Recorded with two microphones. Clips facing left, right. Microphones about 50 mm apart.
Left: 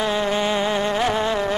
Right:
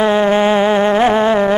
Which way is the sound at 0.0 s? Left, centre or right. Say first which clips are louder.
Right 9 dB; right.